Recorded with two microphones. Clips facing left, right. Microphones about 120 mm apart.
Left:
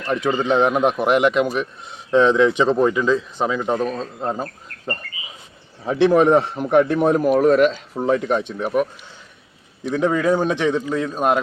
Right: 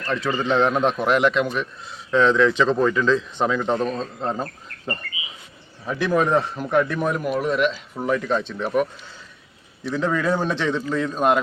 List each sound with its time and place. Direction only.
0.0 s speech: 15° left (ahead or behind)
5.8 s a man's voice: 25° left (ahead or behind)
7.3 s speech: 45° left (ahead or behind)
7.7 s a man's voice: 25° left (ahead or behind); by 8.9 s 10° left (ahead or behind)
10.0 s speech: 15° left (ahead or behind)